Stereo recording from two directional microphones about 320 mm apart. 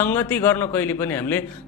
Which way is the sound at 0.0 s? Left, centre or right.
Centre.